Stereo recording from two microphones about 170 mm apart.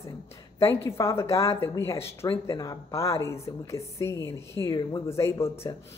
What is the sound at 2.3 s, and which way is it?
Speech, 25° left (ahead or behind).